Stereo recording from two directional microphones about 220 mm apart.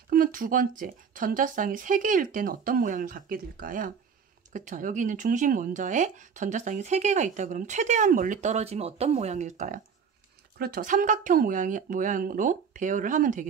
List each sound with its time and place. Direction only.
0.1 s speech: 40° right (ahead or behind)